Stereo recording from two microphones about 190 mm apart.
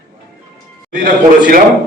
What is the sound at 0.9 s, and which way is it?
Speech, 45° right (ahead or behind).